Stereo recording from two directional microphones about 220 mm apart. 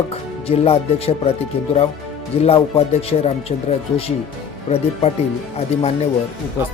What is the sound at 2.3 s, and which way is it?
Speech, 25° left (ahead or behind).